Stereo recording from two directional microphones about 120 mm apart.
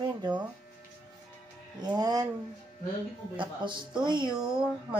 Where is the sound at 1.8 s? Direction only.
35° right (ahead or behind).